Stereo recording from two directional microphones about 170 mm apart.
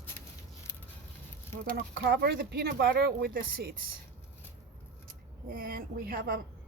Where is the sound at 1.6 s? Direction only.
65° right (ahead or behind).